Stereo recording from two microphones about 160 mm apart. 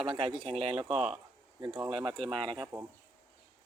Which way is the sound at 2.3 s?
30° right (ahead or behind).